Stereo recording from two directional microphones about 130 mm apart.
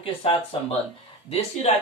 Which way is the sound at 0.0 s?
40° left (ahead or behind).